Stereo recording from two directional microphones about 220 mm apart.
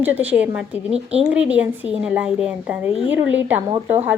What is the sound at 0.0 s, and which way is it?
A woman's voice, 10° right (ahead or behind).